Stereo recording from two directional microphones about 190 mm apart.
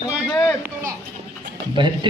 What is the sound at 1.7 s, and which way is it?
Speech, 25° right (ahead or behind).